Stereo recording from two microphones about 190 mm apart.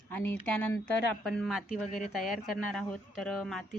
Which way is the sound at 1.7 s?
40° left (ahead or behind).